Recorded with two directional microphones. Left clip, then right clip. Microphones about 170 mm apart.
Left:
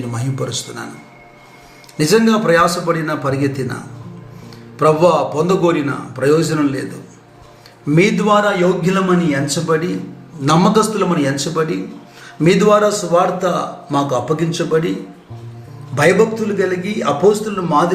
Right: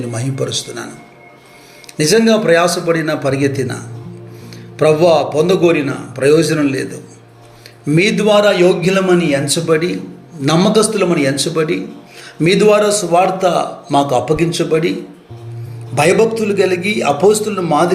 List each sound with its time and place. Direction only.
0.1 s a man's voice: 10° right (ahead or behind)
2.0 s a man's voice: 10° right (ahead or behind)
4.8 s a man's voice: 15° right (ahead or behind)
7.9 s a man's voice: 20° right (ahead or behind)
16.0 s a man's voice: 25° right (ahead or behind)